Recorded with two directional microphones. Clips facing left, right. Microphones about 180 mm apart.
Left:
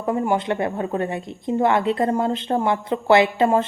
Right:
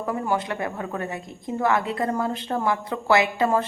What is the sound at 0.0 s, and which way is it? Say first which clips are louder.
A woman's voice: left 4 dB; 25° left (ahead or behind).